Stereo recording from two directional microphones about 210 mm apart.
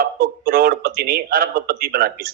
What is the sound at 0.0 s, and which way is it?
A man's voice, 45° right (ahead or behind).